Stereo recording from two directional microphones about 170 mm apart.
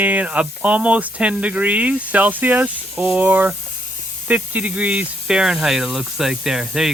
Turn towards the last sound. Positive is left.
turn(degrees=-5)  # may be behind; listen again after turning